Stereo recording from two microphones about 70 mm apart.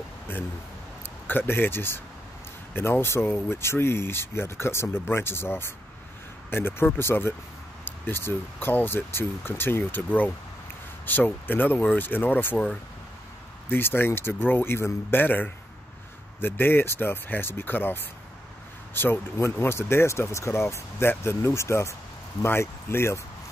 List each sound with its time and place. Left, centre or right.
1.0 s speech: left
13.7 s speech: left